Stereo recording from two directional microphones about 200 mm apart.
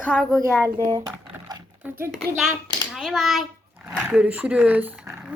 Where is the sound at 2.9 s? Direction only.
Centre (ahead or behind).